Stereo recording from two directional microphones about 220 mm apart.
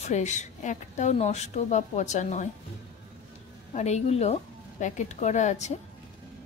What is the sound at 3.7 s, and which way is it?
A woman's voice, 30° left (ahead or behind).